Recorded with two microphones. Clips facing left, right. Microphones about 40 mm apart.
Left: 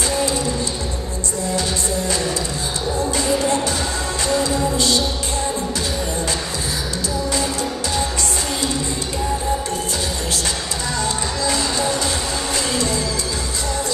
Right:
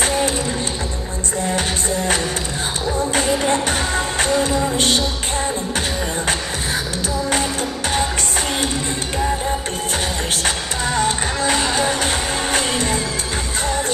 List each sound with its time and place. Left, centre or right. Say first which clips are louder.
0.0 s music: right 2 dB; right
3.1 s music: right 1 dB; right
3.6 s music: right 2 dB; right
10.3 s music: right 2 dB; right